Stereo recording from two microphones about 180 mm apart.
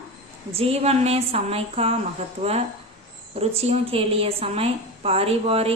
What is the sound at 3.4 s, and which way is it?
A woman's voice, 35° right (ahead or behind).